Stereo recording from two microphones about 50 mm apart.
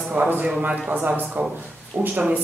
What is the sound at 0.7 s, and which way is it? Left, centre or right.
Speech, right.